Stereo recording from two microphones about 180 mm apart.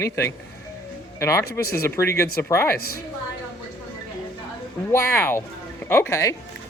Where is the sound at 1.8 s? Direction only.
15° left (ahead or behind).